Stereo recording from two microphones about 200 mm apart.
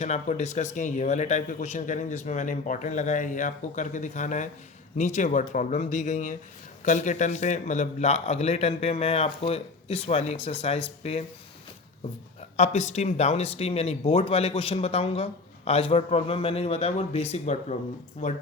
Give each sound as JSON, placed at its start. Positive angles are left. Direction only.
{"t": 0.0, "sound": "speech", "side_deg": 35}
{"t": 12.5, "sound": "speech", "side_deg": 35}